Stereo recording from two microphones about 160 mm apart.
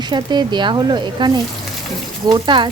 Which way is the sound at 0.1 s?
25° right (ahead or behind).